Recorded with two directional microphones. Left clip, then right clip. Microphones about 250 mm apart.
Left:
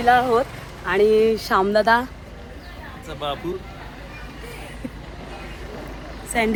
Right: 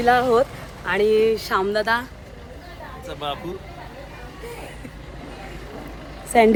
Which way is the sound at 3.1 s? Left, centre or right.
Centre.